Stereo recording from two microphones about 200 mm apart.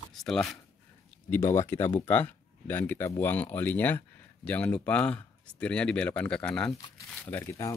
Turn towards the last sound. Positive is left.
turn(degrees=15)  # may be behind; listen again after turning